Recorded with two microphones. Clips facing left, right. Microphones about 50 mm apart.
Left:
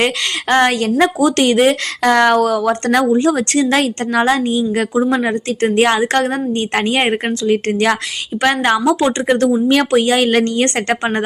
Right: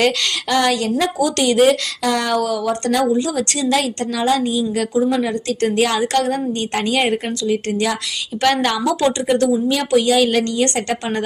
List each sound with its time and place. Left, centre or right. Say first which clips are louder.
0.0 s a woman's voice: left 1 dB; left
8.4 s a woman's voice: left 3 dB; left
9.2 s speech: left 3 dB; left
9.9 s a woman's voice: left 2 dB; left